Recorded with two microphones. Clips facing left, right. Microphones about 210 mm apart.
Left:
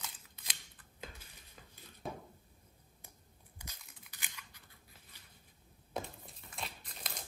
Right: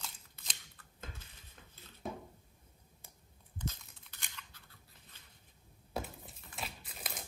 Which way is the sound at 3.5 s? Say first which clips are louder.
Right 13 dB; 10° left (ahead or behind).